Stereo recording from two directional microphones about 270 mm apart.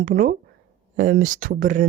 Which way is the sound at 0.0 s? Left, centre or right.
Right.